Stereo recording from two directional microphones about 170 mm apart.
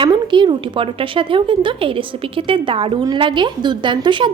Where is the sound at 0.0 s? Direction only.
30° right (ahead or behind).